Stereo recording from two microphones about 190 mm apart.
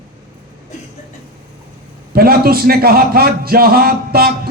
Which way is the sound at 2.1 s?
50° right (ahead or behind).